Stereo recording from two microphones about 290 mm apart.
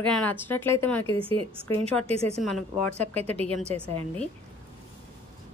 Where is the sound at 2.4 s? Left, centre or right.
Centre.